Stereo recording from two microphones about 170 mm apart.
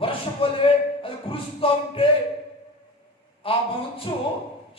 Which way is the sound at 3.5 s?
30° left (ahead or behind).